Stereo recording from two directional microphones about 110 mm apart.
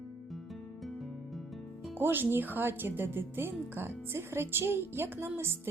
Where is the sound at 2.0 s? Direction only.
20° right (ahead or behind).